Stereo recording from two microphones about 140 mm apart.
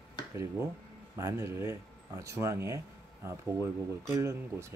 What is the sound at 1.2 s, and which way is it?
Speech, 20° right (ahead or behind).